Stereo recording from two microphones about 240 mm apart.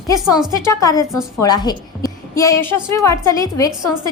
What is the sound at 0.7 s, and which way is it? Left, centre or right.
A woman's voice, centre.